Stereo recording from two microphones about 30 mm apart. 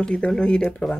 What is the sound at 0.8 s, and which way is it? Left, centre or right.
Speech, left.